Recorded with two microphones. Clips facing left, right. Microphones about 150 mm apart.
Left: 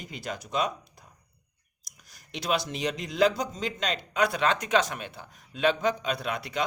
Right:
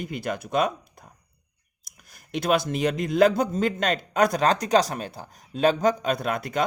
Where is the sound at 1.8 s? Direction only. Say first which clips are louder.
Right 3 dB; 55° right (ahead or behind).